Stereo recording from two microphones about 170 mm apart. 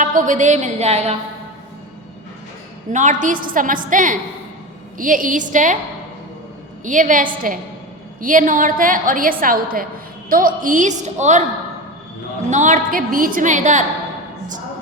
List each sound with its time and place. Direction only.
0.0 s a woman's voice: 50° right (ahead or behind)
2.9 s a woman's voice: 45° right (ahead or behind)
6.8 s a woman's voice: 50° right (ahead or behind)
12.5 s a woman's voice: 45° right (ahead or behind)